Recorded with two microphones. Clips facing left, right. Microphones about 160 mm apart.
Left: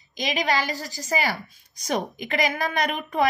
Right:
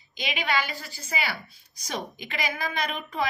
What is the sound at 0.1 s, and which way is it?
A woman's voice, 40° left (ahead or behind).